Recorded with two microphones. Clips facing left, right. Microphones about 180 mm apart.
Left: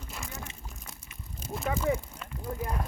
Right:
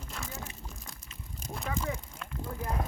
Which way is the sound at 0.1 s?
5° left (ahead or behind).